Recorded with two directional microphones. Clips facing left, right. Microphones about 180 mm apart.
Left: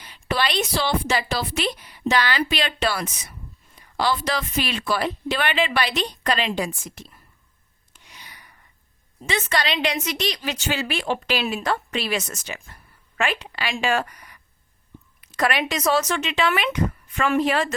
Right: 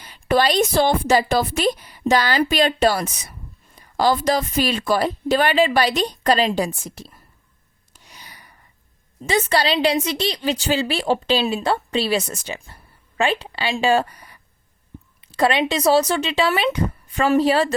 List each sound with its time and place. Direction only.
0.0 s a woman's voice: 40° right (ahead or behind)
7.9 s a sound: 40° right (ahead or behind)
9.2 s a woman's voice: 35° right (ahead or behind)